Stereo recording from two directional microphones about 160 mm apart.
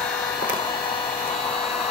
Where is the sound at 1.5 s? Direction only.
35° left (ahead or behind).